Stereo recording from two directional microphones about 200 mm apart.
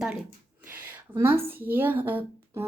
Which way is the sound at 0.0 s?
5° right (ahead or behind).